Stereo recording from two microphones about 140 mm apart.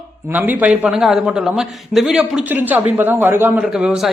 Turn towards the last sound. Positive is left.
turn(degrees=-5)  # may be behind; listen again after turning